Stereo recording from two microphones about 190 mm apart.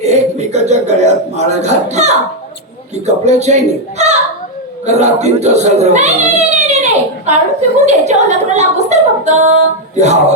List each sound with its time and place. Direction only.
0.0 s a sound: 35° right (ahead or behind)
2.9 s speech: 35° right (ahead or behind)
7.9 s a capella: 35° right (ahead or behind)